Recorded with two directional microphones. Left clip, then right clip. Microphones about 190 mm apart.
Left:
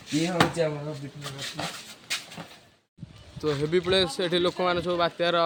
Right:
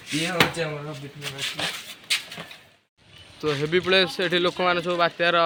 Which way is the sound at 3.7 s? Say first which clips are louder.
Right 4 dB; centre (ahead or behind).